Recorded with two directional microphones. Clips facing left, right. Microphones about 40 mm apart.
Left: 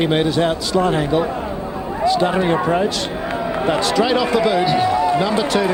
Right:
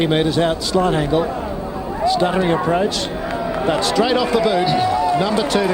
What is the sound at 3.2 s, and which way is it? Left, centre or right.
Speech, left.